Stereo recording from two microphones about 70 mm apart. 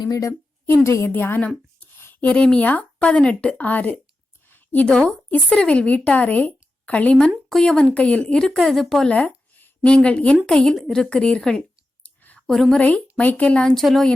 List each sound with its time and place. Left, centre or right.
0.2 s a woman's voice: left
1.1 s a woman's voice: left
2.2 s speech: centre
4.4 s a sound: left
4.9 s a woman's voice: centre
9.0 s a sound: centre
9.8 s speech: centre
12.0 s a sound: left
12.5 s speech: centre
12.7 s a woman's voice: left
13.7 s speech: centre